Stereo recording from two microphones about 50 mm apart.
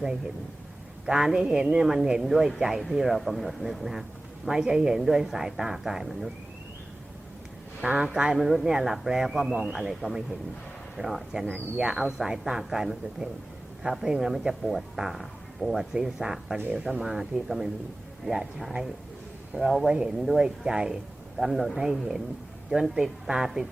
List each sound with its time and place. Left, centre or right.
1.0 s speech: centre
7.8 s speech: right
8.0 s speech: centre
9.7 s speech: centre
11.8 s speech: centre
12.0 s speech: centre
19.9 s speech: centre
21.3 s speech: centre